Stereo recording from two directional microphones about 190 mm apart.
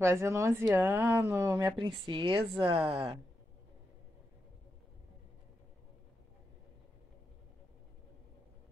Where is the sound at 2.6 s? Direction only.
30° right (ahead or behind).